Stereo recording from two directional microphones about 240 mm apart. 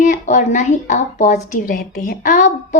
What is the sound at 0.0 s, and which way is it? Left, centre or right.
A woman's voice, left.